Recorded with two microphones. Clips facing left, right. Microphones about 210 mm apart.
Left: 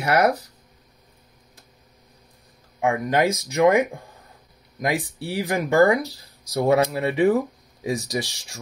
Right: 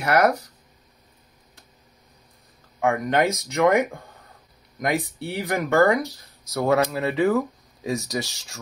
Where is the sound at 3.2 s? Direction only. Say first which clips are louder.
Left 2 dB; 30° left (ahead or behind).